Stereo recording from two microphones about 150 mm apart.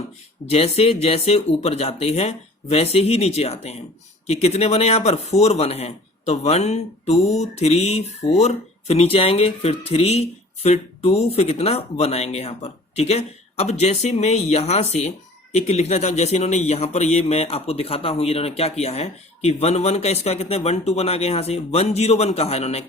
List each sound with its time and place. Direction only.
0.5 s speech: 45° left (ahead or behind)